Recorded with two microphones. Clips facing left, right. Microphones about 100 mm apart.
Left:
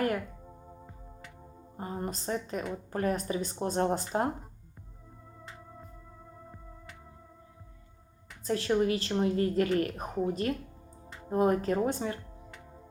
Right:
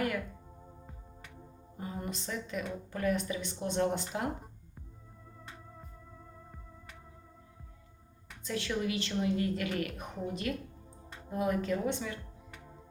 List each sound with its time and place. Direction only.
1.7 s a woman's voice: 40° left (ahead or behind)
8.4 s a woman's voice: 40° left (ahead or behind)